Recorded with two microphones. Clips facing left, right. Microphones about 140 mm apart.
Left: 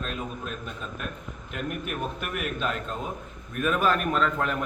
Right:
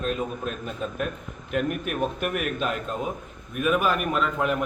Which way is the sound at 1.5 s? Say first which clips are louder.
Right 6 dB; 50° right (ahead or behind).